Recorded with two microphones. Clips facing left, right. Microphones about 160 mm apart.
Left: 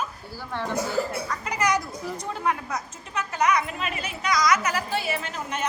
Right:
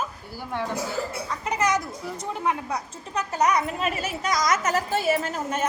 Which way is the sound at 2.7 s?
40° right (ahead or behind).